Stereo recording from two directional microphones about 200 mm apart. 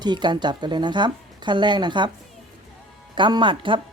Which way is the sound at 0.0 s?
20° right (ahead or behind).